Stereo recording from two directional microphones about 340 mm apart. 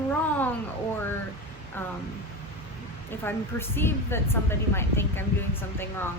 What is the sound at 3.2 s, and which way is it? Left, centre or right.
A woman's voice, centre.